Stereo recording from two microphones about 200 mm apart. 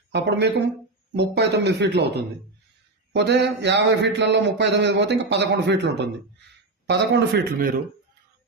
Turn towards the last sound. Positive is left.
turn(degrees=-50)  # may be behind; listen again after turning